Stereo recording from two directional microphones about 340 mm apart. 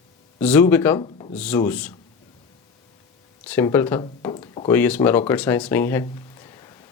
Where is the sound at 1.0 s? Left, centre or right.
Centre.